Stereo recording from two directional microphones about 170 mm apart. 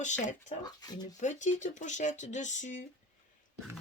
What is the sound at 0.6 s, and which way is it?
Speech, 25° left (ahead or behind).